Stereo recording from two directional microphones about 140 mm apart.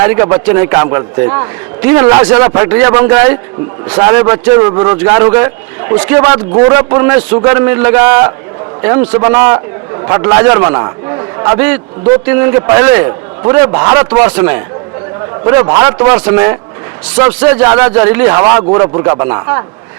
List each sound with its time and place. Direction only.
0.0 s a man's voice: 20° right (ahead or behind)
15.4 s a man's voice: 20° right (ahead or behind)